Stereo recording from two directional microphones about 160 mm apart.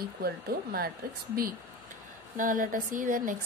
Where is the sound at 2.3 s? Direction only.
60° right (ahead or behind).